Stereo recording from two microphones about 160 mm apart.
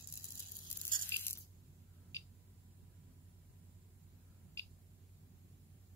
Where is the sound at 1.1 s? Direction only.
15° left (ahead or behind).